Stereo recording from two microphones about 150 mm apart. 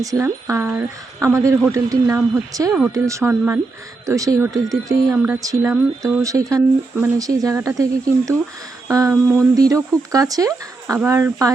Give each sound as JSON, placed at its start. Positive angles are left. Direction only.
{"t": 0.0, "sound": "speech", "side_deg": -20}